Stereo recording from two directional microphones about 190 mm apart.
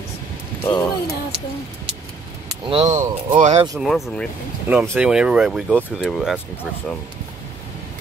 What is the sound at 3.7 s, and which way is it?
Speech, centre (ahead or behind).